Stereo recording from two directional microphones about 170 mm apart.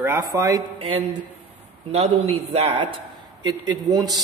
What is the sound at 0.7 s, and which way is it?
A man's voice, 35° right (ahead or behind).